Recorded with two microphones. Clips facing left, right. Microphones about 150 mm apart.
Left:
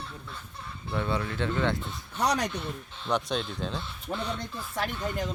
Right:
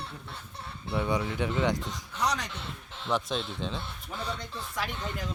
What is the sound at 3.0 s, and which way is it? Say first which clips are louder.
Speech: left 1 dB; centre (ahead or behind).